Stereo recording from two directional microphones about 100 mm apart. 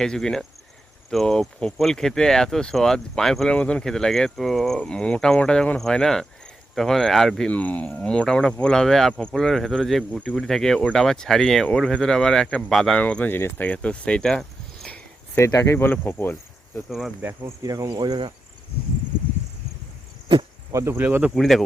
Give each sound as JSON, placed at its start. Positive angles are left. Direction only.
{"t": 0.0, "sound": "speech", "side_deg": 5}
{"t": 15.4, "sound": "speech", "side_deg": 30}
{"t": 17.2, "sound": "cricket", "side_deg": -20}
{"t": 17.6, "sound": "speech", "side_deg": -40}
{"t": 20.7, "sound": "cricket", "side_deg": -25}
{"t": 21.3, "sound": "speech", "side_deg": 0}